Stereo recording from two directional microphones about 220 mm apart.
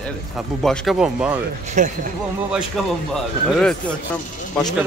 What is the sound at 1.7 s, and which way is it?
Speech, 35° right (ahead or behind).